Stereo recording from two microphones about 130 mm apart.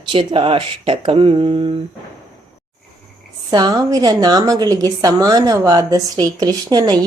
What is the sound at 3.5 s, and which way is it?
A woman's voice, 30° right (ahead or behind).